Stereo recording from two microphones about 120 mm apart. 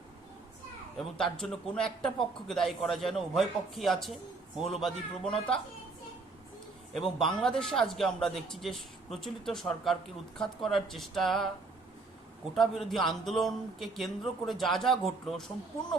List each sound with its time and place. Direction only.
0.9 s speech: 5° left (ahead or behind)
6.9 s speech: centre (ahead or behind)
12.5 s speech: centre (ahead or behind)